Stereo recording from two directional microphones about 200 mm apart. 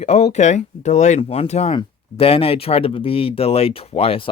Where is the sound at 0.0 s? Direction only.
35° left (ahead or behind).